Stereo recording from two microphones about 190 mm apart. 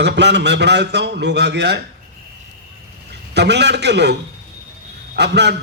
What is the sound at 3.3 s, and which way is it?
A man's voice, 65° right (ahead or behind).